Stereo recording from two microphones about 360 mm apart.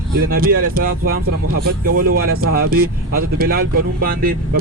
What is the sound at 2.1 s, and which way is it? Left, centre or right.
Speech, right.